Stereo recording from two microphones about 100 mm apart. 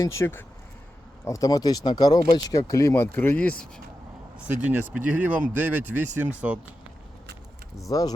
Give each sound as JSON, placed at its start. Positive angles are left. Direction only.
{"t": 0.0, "sound": "speech", "side_deg": 30}
{"t": 4.4, "sound": "speech", "side_deg": -15}
{"t": 7.9, "sound": "speech", "side_deg": 35}